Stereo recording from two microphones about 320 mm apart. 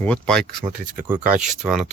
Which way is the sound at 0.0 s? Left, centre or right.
Centre.